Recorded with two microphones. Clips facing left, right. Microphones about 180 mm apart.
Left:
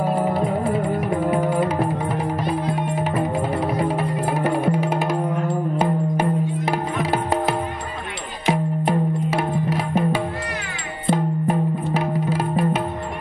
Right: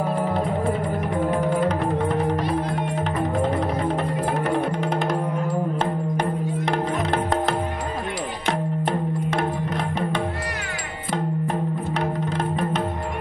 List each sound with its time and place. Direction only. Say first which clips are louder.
1.3 s music: even; 5° left (ahead or behind)
11.4 s music: left 4 dB; 5° left (ahead or behind)